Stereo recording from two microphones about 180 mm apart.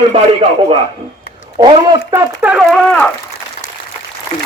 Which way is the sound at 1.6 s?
25° right (ahead or behind).